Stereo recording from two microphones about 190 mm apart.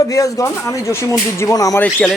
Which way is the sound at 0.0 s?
15° left (ahead or behind).